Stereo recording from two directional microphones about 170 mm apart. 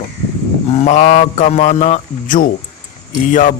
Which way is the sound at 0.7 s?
40° left (ahead or behind).